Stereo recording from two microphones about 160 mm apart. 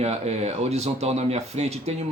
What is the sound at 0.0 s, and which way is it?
Speech, 40° right (ahead or behind).